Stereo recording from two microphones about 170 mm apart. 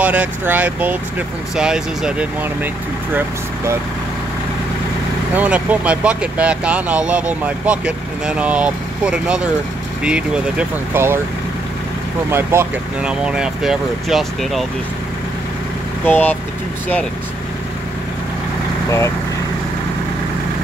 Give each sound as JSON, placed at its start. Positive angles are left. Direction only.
{"t": 0.0, "sound": "speech", "side_deg": -10}
{"t": 5.3, "sound": "speech", "side_deg": -10}
{"t": 12.3, "sound": "speech", "side_deg": -15}
{"t": 16.1, "sound": "speech", "side_deg": 10}
{"t": 18.9, "sound": "speech", "side_deg": 15}